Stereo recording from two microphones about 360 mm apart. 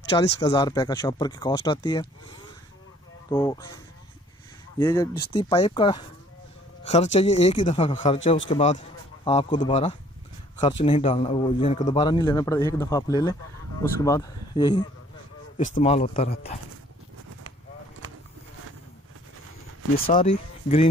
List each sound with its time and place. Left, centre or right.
0.2 s speech: centre
3.3 s a man's voice: centre
20.1 s speech: centre